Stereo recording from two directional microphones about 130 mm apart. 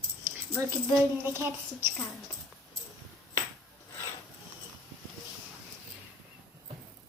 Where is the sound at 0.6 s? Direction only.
20° right (ahead or behind).